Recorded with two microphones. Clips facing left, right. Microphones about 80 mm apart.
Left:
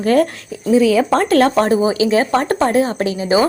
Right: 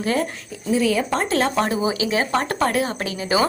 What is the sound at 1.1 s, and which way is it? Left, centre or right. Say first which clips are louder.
Speech: left 8 dB; left.